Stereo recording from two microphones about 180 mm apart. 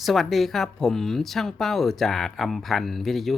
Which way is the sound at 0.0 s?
Centre (ahead or behind).